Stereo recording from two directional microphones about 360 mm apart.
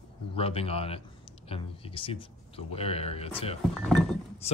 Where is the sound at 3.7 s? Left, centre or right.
Centre.